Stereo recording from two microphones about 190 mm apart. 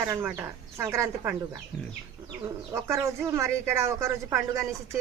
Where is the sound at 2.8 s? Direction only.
15° right (ahead or behind).